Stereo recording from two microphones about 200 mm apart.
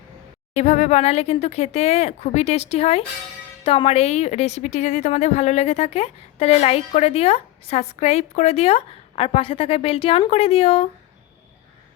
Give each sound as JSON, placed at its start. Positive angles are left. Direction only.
{"t": 0.5, "sound": "a woman's voice", "side_deg": 35}